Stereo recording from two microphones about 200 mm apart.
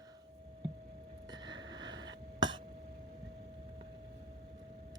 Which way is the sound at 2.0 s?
20° right (ahead or behind).